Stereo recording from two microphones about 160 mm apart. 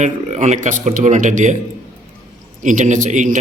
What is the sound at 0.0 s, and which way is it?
Speech, 45° right (ahead or behind).